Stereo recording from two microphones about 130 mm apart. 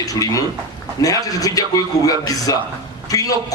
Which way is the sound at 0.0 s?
25° left (ahead or behind).